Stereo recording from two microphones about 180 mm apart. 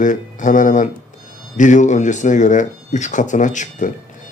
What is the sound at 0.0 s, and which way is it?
Speech, 45° left (ahead or behind).